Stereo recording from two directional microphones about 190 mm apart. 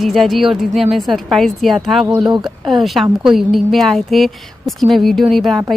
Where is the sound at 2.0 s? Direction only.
20° right (ahead or behind).